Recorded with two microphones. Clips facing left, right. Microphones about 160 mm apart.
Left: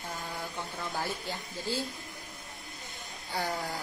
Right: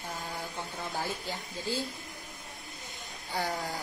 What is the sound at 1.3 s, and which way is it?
Speech, 15° right (ahead or behind).